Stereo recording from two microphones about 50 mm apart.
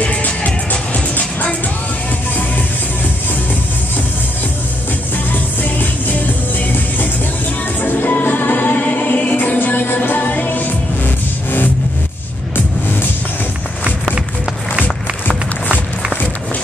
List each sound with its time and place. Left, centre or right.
0.0 s music: left
5.3 s music: left
15.2 s music: left